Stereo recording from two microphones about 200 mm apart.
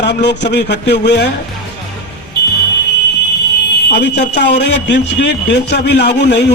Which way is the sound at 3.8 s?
60° left (ahead or behind).